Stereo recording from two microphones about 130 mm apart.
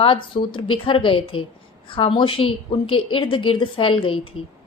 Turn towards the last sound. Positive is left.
turn(degrees=40)  # may be behind; listen again after turning